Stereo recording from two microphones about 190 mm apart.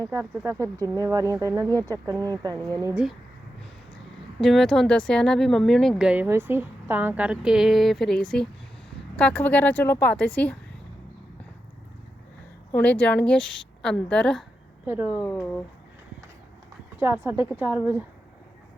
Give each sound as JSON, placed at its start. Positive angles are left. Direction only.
{"t": 0.1, "sound": "speech", "side_deg": -15}
{"t": 2.6, "sound": "a woman's voice", "side_deg": 5}
{"t": 2.8, "sound": "speech", "side_deg": -5}
{"t": 4.4, "sound": "a woman's voice", "side_deg": 0}
{"t": 12.7, "sound": "speech", "side_deg": 5}
{"t": 14.8, "sound": "speech", "side_deg": -10}
{"t": 15.3, "sound": "a woman's voice", "side_deg": 5}
{"t": 17.0, "sound": "speech", "side_deg": -10}